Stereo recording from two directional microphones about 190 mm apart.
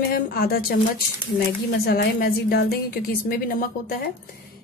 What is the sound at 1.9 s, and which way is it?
A woman's voice, 55° left (ahead or behind).